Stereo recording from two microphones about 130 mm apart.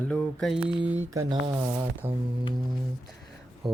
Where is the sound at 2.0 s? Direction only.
15° right (ahead or behind).